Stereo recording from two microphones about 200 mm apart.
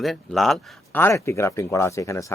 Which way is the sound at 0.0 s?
Centre (ahead or behind).